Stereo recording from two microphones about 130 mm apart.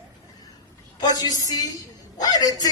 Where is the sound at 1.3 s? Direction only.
30° left (ahead or behind).